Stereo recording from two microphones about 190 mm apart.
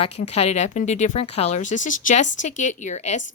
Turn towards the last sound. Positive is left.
turn(degrees=40)  # may be behind; listen again after turning